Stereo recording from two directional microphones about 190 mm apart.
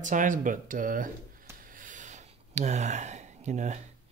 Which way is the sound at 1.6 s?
45° right (ahead or behind).